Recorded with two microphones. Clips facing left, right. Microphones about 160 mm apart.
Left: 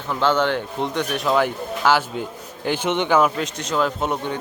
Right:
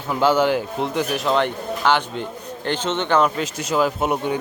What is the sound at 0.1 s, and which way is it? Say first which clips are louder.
Speech: right 2 dB; 10° right (ahead or behind).